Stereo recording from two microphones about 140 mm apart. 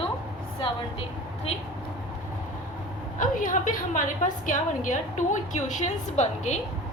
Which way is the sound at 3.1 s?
70° left (ahead or behind).